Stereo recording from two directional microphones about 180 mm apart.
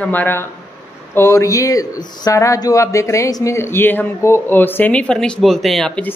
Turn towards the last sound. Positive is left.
turn(degrees=5)  # may be behind; listen again after turning